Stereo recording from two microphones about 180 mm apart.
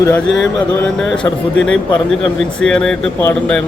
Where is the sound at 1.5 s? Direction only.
90° left.